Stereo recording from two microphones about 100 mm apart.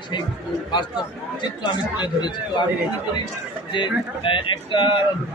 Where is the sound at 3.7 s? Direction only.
55° left (ahead or behind).